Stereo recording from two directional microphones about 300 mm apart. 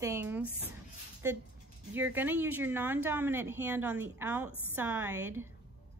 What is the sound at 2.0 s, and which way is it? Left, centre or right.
Speech, centre.